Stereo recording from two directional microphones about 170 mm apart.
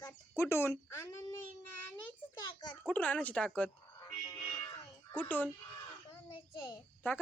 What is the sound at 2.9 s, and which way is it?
Speech, 10° left (ahead or behind).